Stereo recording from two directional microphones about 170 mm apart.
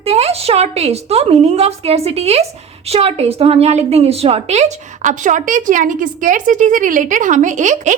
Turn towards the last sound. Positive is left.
turn(degrees=-45)  # may be behind; listen again after turning